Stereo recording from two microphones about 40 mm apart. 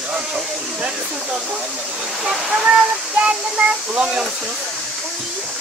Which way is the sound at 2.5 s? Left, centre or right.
Right.